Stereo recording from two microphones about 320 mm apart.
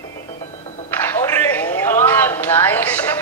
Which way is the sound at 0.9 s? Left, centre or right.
Centre.